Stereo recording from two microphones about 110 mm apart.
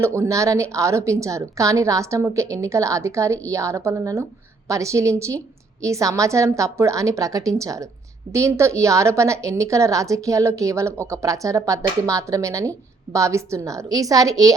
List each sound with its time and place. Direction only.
0.0 s a woman's voice: 25° right (ahead or behind)